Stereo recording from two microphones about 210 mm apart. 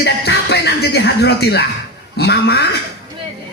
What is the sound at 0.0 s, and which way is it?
Music, 55° left (ahead or behind).